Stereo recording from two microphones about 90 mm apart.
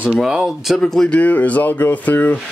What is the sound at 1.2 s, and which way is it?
Speech, 15° left (ahead or behind).